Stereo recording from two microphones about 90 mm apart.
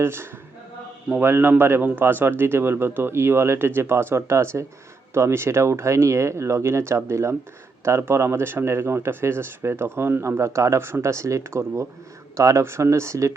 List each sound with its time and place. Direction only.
0.0 s speech: 30° right (ahead or behind)